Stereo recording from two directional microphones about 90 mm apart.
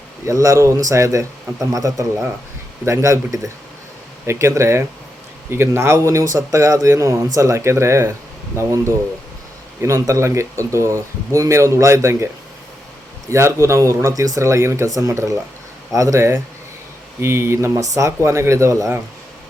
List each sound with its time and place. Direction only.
0.3 s speech: 35° right (ahead or behind)
9.8 s speech: 35° right (ahead or behind)
13.3 s speech: 35° right (ahead or behind)